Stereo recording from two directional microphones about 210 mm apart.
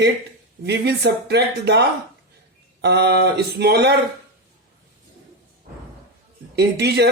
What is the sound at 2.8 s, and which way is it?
Speech, 50° right (ahead or behind).